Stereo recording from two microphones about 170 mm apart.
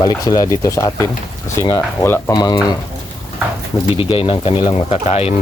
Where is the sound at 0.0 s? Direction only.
20° left (ahead or behind).